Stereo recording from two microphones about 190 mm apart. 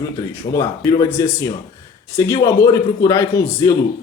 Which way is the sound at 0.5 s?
20° left (ahead or behind).